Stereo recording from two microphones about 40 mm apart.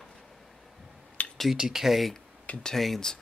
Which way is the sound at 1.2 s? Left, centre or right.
Left.